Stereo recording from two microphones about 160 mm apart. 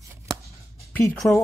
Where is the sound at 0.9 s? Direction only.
10° left (ahead or behind).